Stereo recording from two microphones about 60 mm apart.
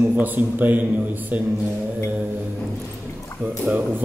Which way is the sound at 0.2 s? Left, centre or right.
Right.